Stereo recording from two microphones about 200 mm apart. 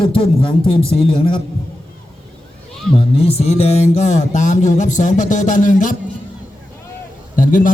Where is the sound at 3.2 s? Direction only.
30° left (ahead or behind).